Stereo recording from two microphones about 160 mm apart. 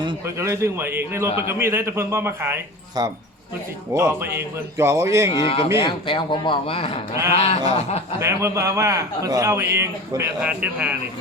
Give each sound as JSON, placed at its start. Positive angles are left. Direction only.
{"t": 0.3, "sound": "a man's voice", "side_deg": -20}
{"t": 5.3, "sound": "a man's voice", "side_deg": 35}
{"t": 8.2, "sound": "a man's voice", "side_deg": -20}